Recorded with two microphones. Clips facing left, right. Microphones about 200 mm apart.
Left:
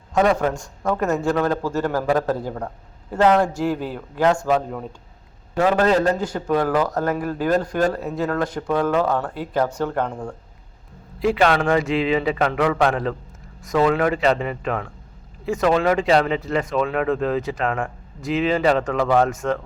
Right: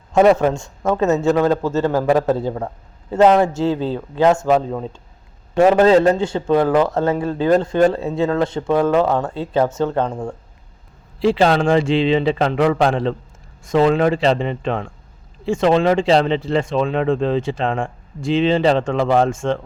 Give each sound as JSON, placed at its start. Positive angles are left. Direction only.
{"t": 0.1, "sound": "speech", "side_deg": -25}
{"t": 5.5, "sound": "speech", "side_deg": -25}